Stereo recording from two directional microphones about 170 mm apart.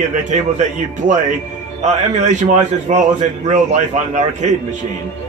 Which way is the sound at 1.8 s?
45° right (ahead or behind).